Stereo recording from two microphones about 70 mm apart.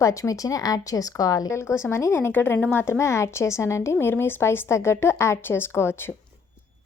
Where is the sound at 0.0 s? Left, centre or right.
Left.